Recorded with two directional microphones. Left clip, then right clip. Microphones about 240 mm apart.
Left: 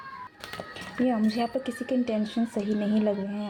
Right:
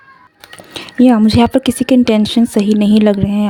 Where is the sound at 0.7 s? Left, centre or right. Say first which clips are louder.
Right 17 dB; right.